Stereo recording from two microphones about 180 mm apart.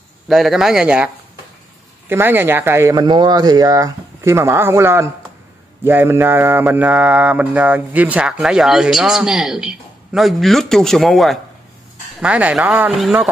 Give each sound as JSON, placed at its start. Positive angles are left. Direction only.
{"t": 0.3, "sound": "mantra", "side_deg": 0}
{"t": 2.0, "sound": "speech", "side_deg": -10}
{"t": 5.9, "sound": "mantra", "side_deg": -10}
{"t": 12.2, "sound": "speech", "side_deg": -5}